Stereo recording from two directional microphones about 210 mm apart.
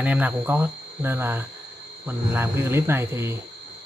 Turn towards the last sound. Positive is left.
turn(degrees=-10)  # may be behind; listen again after turning